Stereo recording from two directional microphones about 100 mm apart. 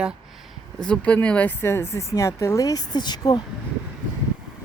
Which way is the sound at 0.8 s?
10° left (ahead or behind).